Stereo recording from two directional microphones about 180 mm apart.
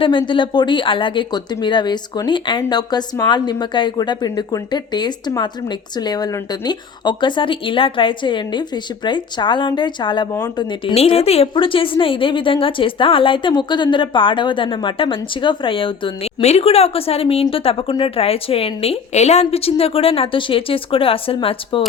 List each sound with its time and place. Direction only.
0.0 s speech: 25° left (ahead or behind)